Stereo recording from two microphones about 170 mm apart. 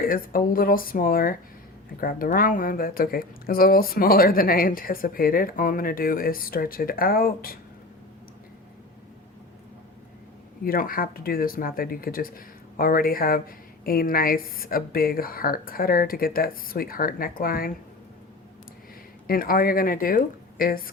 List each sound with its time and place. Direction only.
0.0 s speech: 60° left (ahead or behind)
10.6 s speech: 60° left (ahead or behind)
19.3 s speech: 60° left (ahead or behind)